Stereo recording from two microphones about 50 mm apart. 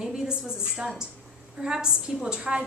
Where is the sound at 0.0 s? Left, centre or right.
Centre.